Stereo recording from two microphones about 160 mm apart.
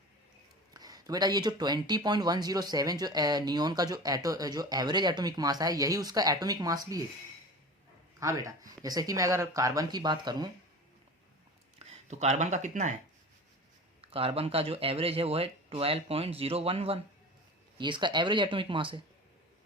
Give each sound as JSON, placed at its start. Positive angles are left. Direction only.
{"t": 0.7, "sound": "speech", "side_deg": -25}
{"t": 8.2, "sound": "speech", "side_deg": -20}
{"t": 11.8, "sound": "speech", "side_deg": -45}
{"t": 14.0, "sound": "speech", "side_deg": -35}